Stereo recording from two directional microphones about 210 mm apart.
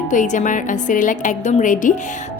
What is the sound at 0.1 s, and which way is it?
A woman's voice, 35° left (ahead or behind).